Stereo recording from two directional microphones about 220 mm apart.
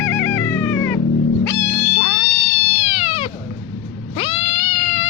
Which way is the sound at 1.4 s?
15° left (ahead or behind).